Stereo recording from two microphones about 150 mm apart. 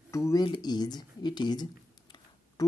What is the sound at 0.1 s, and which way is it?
Speech, 20° left (ahead or behind).